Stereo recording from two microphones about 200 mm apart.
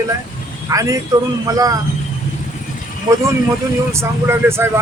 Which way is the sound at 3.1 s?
15° right (ahead or behind).